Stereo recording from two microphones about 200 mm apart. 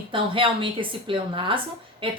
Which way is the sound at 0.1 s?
25° right (ahead or behind).